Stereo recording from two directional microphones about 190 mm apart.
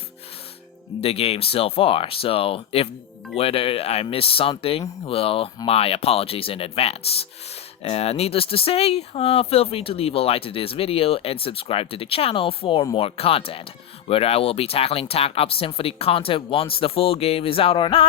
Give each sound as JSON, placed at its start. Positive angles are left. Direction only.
{"t": 1.0, "sound": "speech", "side_deg": 30}